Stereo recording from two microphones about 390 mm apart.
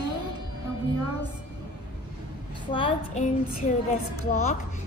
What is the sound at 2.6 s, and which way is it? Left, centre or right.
A woman's voice, centre.